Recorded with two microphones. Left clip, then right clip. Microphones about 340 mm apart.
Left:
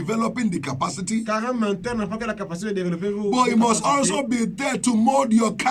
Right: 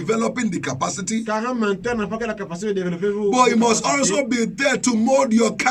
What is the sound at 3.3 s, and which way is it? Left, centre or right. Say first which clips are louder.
Speech: right 2 dB; centre.